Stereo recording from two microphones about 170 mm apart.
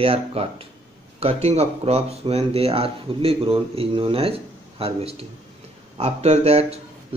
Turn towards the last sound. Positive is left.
turn(degrees=-40)  # may be behind; listen again after turning